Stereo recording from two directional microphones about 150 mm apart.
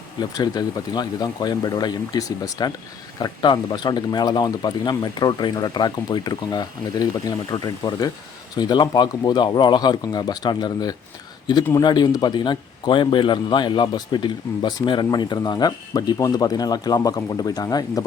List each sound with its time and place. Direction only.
0.2 s speech: 25° left (ahead or behind)